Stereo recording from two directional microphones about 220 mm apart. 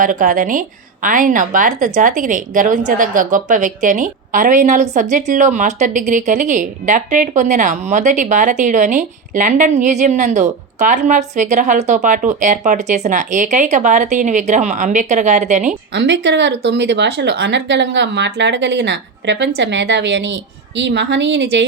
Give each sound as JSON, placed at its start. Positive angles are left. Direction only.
{"t": 0.0, "sound": "a woman's voice", "side_deg": -35}
{"t": 15.9, "sound": "speech", "side_deg": -55}